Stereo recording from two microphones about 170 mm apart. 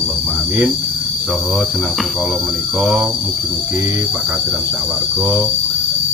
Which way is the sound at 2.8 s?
5° right (ahead or behind).